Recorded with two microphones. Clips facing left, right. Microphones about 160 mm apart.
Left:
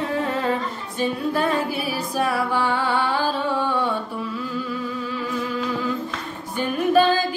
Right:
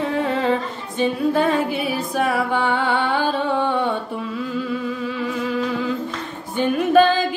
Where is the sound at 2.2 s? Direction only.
20° right (ahead or behind).